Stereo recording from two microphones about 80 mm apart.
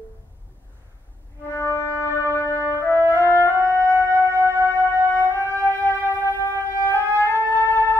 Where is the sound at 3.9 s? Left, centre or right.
Right.